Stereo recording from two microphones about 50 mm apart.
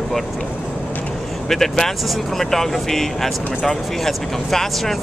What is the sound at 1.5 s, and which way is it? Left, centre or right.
Speech, centre.